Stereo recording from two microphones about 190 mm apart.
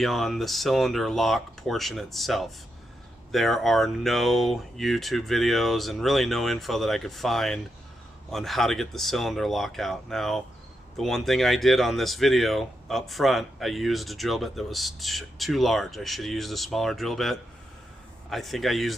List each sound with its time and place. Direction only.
0.0 s speech: centre (ahead or behind)